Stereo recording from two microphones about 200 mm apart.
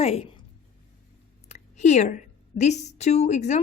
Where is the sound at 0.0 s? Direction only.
30° left (ahead or behind).